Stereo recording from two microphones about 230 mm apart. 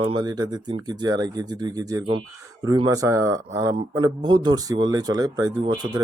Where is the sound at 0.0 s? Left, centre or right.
Centre.